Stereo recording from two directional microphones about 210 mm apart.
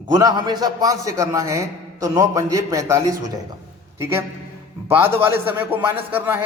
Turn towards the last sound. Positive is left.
turn(degrees=-10)  # may be behind; listen again after turning